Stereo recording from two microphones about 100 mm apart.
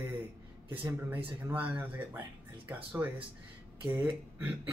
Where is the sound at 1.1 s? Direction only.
20° right (ahead or behind).